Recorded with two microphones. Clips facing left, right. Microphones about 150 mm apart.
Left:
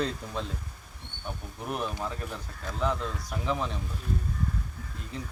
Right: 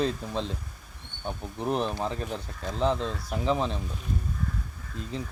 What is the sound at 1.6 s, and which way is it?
Speech, 30° right (ahead or behind).